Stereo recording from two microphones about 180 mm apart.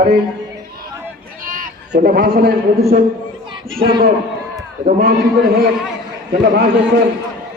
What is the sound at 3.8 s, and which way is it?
Speech, 25° right (ahead or behind).